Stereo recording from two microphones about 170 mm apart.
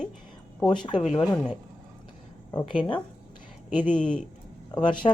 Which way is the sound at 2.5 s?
10° left (ahead or behind).